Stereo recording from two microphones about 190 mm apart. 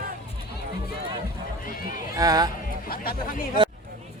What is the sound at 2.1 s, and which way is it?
Speech, 20° right (ahead or behind).